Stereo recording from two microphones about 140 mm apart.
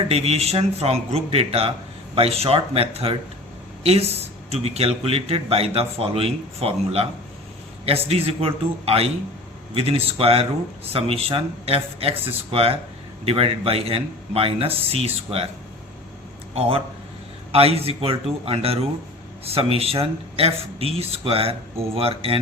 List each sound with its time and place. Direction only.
0.1 s a man's voice: 45° right (ahead or behind)
4.4 s a man's voice: 50° right (ahead or behind)
16.6 s a man's voice: 40° right (ahead or behind)